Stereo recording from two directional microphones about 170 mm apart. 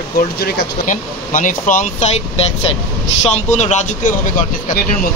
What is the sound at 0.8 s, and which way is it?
Speech, 50° left (ahead or behind).